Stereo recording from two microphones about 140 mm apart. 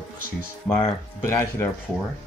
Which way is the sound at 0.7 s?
25° left (ahead or behind).